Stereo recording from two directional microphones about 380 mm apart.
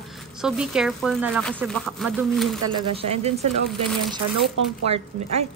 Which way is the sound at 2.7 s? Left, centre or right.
Centre.